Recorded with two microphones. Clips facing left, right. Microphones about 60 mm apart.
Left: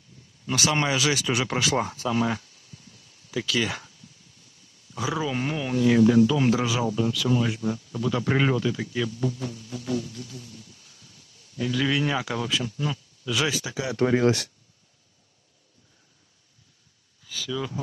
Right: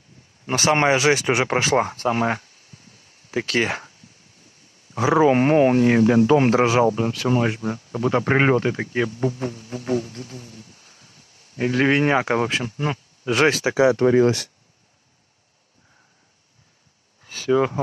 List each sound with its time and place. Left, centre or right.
0.5 s speech: right
14.1 s speech: right
17.2 s speech: right